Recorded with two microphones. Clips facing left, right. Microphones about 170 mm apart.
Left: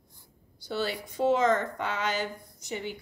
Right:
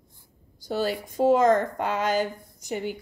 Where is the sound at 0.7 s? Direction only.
45° right (ahead or behind).